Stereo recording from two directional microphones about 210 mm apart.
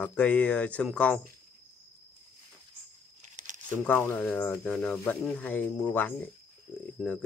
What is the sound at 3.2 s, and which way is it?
Crumpling, 35° right (ahead or behind).